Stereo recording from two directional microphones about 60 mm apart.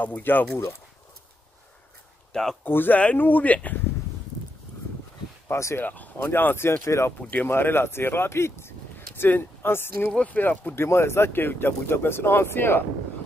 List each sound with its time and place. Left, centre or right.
0.0 s speech: left
2.6 s speech: left
5.5 s speech: left
5.8 s speech: left
6.3 s speech: left
7.2 s speech: left
7.4 s speech: left
10.1 s speech: left
10.8 s speech: left